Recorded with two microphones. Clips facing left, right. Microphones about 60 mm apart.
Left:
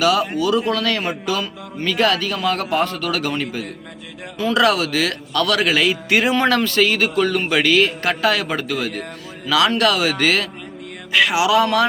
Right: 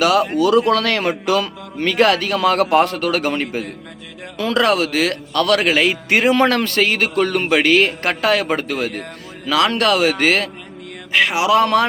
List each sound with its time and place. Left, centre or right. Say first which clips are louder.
0.0 s speech: right 3 dB; right
4.6 s a man's voice: right 1 dB; right